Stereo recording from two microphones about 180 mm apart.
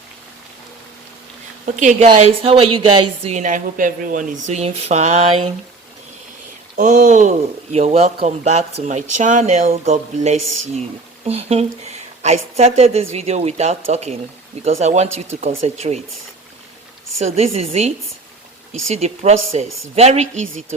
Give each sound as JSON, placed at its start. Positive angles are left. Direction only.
{"t": 1.7, "sound": "a woman's voice", "side_deg": -45}
{"t": 2.0, "sound": "speech", "side_deg": -30}
{"t": 6.7, "sound": "speech", "side_deg": -45}
{"t": 17.2, "sound": "speech", "side_deg": -35}